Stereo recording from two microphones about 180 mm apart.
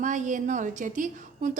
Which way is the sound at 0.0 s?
45° right (ahead or behind).